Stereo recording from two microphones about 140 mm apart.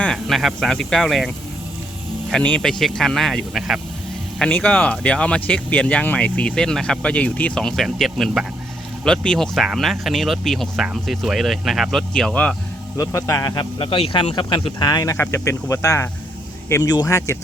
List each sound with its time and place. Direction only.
0.0 s speech: 5° left (ahead or behind)
2.3 s speech: 5° left (ahead or behind)
13.0 s speech: 25° left (ahead or behind)